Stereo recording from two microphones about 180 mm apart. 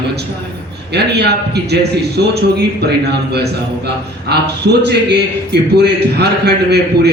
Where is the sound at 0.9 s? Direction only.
65° right (ahead or behind).